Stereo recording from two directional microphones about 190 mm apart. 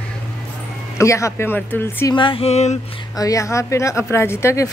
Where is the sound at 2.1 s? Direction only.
25° left (ahead or behind).